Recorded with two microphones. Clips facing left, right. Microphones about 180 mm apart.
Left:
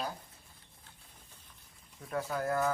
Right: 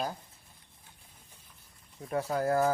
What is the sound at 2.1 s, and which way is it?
Speech, 30° right (ahead or behind).